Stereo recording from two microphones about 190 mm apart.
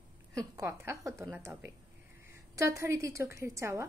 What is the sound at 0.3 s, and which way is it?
A woman's voice, 15° right (ahead or behind).